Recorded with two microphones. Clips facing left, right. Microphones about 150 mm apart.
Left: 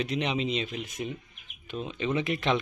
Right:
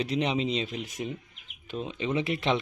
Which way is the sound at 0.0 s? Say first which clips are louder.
Right 2 dB; 30° right (ahead or behind).